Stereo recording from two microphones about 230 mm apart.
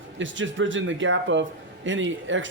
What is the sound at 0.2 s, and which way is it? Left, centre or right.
A man's voice, right.